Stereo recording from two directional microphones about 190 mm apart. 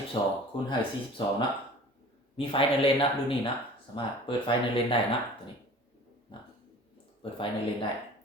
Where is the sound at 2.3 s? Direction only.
30° left (ahead or behind).